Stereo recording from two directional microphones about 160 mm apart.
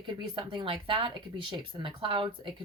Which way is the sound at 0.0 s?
30° right (ahead or behind).